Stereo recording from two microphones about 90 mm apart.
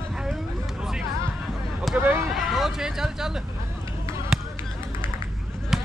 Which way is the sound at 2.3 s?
Centre (ahead or behind).